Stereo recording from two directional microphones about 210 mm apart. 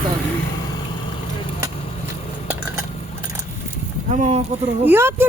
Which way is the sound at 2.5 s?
10° right (ahead or behind).